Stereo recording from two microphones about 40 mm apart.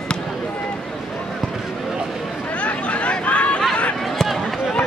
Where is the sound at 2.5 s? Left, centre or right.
Left.